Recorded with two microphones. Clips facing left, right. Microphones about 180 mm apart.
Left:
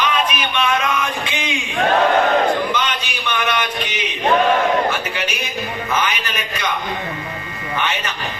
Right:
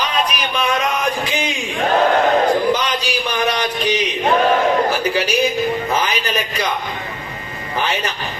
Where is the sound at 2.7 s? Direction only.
35° right (ahead or behind).